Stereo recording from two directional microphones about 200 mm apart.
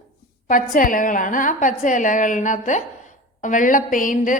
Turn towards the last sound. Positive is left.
turn(degrees=40)  # may be behind; listen again after turning